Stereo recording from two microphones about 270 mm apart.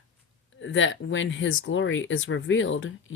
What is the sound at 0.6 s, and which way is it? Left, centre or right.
Speech, left.